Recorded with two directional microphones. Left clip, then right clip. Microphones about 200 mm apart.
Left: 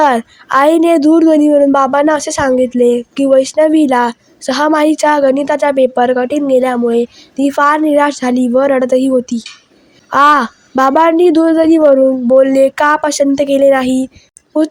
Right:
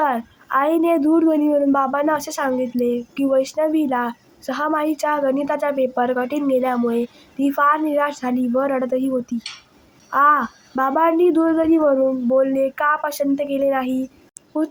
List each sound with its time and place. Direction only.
0.0 s a woman's voice: 45° left (ahead or behind)